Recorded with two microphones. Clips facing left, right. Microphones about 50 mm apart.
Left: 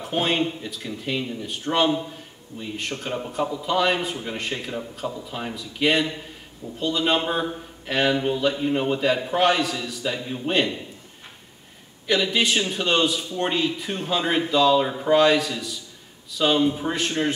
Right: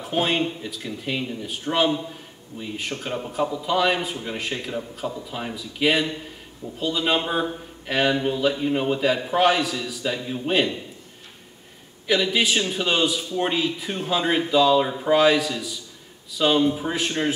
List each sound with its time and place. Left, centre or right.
0.0 s speech: centre
12.1 s speech: centre